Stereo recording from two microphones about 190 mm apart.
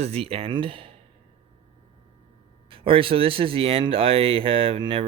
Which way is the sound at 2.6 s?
30° right (ahead or behind).